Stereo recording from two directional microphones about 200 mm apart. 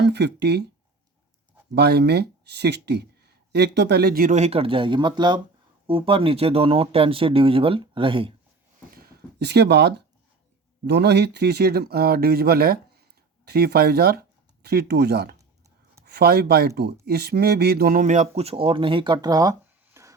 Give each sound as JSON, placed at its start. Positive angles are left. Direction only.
{"t": 0.0, "sound": "speech", "side_deg": -60}
{"t": 1.7, "sound": "speech", "side_deg": -55}
{"t": 8.9, "sound": "a sound", "side_deg": -50}
{"t": 10.8, "sound": "speech", "side_deg": -55}